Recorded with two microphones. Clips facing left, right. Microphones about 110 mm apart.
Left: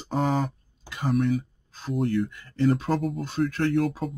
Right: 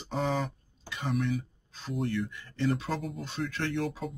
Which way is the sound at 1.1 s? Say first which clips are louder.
Left 7 dB; 50° left (ahead or behind).